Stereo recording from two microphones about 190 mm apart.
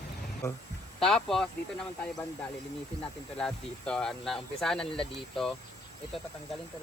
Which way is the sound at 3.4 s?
5° left (ahead or behind).